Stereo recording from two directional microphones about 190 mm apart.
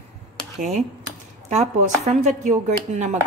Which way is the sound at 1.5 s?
35° right (ahead or behind).